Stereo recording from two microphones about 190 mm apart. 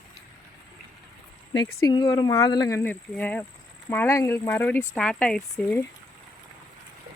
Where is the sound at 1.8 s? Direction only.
20° left (ahead or behind).